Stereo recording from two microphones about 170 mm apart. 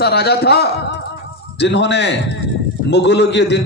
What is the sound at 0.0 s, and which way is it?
A man's voice, 70° left (ahead or behind).